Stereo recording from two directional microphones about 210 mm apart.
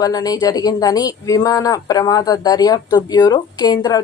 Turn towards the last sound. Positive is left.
turn(degrees=20)  # may be behind; listen again after turning